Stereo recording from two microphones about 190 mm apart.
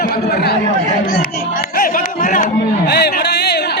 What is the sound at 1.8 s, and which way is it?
Music, 45° left (ahead or behind).